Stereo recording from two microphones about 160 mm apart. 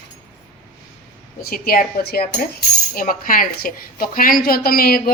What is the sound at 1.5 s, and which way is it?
Cutlery, 65° left (ahead or behind).